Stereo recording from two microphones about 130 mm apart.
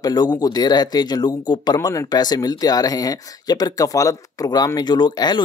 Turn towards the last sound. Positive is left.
turn(degrees=35)  # may be behind; listen again after turning